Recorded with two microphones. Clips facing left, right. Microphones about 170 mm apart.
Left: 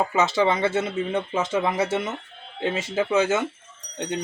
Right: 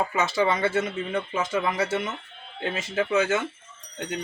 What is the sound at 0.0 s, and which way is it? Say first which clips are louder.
Speech: left 3 dB; 25° left (ahead or behind).